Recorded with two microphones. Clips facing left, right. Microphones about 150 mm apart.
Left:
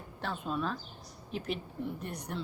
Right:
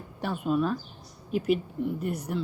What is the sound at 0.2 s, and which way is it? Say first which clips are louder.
A woman's voice: right 8 dB; 10° right (ahead or behind).